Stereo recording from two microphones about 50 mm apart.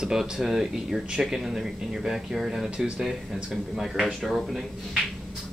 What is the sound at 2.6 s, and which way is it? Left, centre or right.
Speech, right.